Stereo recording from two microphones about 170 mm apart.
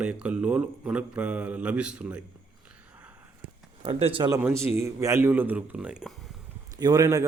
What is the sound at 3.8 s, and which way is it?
Speech, 35° right (ahead or behind).